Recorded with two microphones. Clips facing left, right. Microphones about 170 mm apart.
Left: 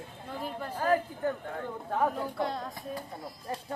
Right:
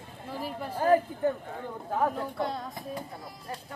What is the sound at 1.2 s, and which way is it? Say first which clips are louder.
Speech: right 3 dB; 20° right (ahead or behind).